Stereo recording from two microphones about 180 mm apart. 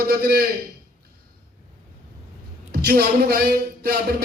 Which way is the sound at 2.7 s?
60° right (ahead or behind).